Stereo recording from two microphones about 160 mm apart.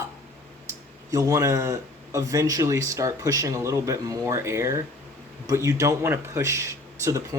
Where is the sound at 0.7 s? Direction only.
20° right (ahead or behind).